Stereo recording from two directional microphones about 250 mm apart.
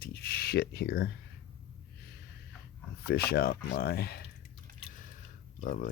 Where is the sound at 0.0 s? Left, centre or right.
Left.